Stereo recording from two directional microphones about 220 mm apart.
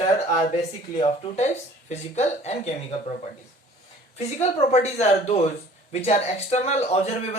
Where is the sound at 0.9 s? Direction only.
25° left (ahead or behind).